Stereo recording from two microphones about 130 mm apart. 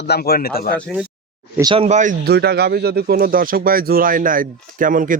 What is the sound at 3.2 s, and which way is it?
Speech, 90° right.